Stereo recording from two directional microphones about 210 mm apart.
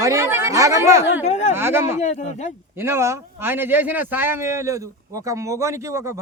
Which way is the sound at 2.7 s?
10° right (ahead or behind).